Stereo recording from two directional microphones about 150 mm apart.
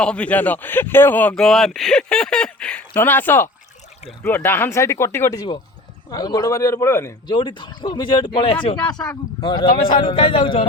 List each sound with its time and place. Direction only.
0.0 s speech: 5° left (ahead or behind)
7.3 s speech: 30° left (ahead or behind)